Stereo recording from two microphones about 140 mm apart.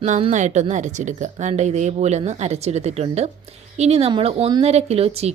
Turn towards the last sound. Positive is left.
turn(degrees=-45)  # may be behind; listen again after turning